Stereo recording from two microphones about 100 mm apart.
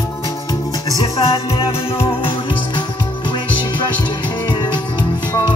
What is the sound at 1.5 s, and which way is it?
Music, 70° left (ahead or behind).